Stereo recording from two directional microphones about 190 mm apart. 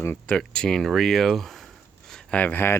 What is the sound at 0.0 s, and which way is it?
Speech, 10° left (ahead or behind).